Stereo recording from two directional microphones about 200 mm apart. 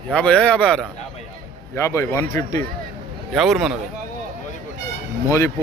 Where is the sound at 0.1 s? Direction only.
5° left (ahead or behind).